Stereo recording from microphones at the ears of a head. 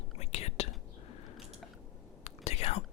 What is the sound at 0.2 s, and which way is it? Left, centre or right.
Whispering, left.